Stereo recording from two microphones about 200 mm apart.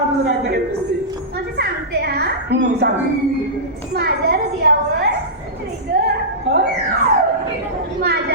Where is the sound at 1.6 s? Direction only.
55° right (ahead or behind).